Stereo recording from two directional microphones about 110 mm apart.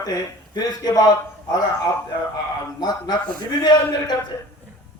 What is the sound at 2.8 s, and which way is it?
A man's voice, 40° left (ahead or behind).